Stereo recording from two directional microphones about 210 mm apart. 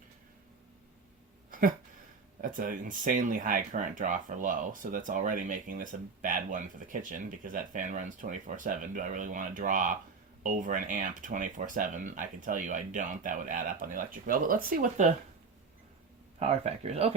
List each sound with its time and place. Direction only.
1.5 s a sound: 40° right (ahead or behind)
2.4 s speech: 40° right (ahead or behind)
16.4 s speech: 30° right (ahead or behind)